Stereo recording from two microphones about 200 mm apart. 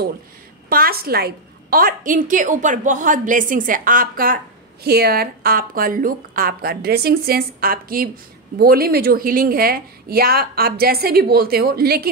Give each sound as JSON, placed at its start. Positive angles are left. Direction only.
{"t": 0.7, "sound": "a woman's voice", "side_deg": -50}